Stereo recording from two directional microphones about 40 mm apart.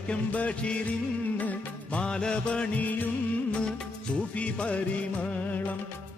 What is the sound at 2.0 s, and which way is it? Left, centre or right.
Music, left.